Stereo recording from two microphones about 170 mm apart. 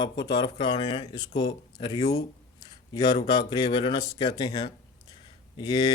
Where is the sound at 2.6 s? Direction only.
25° left (ahead or behind).